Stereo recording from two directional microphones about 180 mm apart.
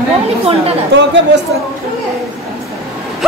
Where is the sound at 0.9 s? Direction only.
75° right (ahead or behind).